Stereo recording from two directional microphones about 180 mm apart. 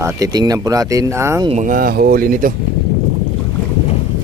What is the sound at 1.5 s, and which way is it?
Speech, 45° right (ahead or behind).